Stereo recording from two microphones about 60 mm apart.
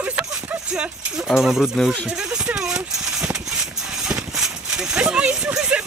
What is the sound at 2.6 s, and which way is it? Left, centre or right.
Horse, centre.